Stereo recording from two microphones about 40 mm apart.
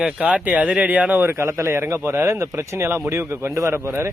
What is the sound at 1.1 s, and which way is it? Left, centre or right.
Speech, right.